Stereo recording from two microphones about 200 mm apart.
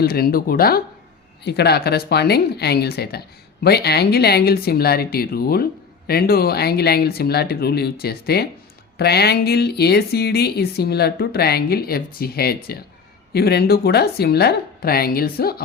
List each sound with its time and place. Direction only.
0.0 s speech: 50° left (ahead or behind)